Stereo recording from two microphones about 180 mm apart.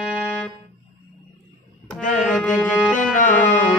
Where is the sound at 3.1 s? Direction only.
45° left (ahead or behind).